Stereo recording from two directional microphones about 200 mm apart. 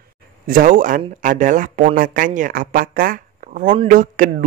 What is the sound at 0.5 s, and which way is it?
Speech, 40° right (ahead or behind).